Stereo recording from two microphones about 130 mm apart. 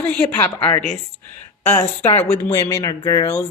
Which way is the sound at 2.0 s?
55° left (ahead or behind).